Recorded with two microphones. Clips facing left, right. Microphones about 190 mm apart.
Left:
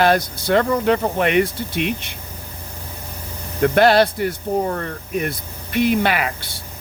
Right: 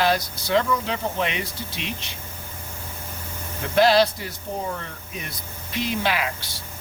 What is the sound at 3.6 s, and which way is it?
Speech, 60° left (ahead or behind).